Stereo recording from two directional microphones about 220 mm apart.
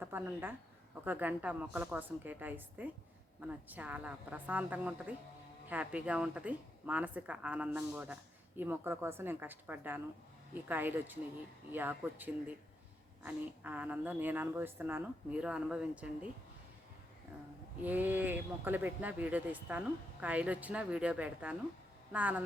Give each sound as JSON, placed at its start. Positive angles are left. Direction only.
{"t": 0.0, "sound": "speech", "side_deg": -10}
{"t": 17.8, "sound": "speech", "side_deg": -10}